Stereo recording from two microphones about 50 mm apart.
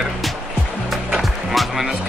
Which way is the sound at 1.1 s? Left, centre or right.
Centre.